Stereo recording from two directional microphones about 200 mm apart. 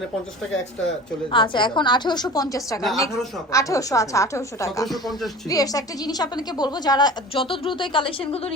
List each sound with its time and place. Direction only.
1.3 s a woman's voice: 25° left (ahead or behind)
4.9 s speech: centre (ahead or behind)
5.5 s a woman's voice: 20° left (ahead or behind)